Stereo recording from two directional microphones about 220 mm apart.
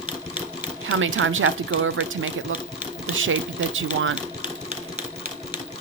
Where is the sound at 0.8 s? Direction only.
65° right (ahead or behind).